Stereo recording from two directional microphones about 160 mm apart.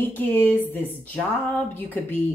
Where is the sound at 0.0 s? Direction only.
10° left (ahead or behind).